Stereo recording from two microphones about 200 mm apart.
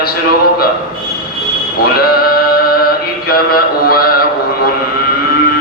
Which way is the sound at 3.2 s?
50° left (ahead or behind).